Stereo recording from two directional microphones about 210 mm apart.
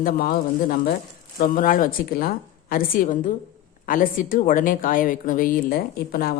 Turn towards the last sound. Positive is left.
turn(degrees=45)  # may be behind; listen again after turning